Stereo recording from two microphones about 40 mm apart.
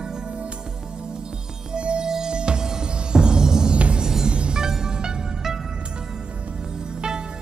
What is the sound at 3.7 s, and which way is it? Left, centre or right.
Music, right.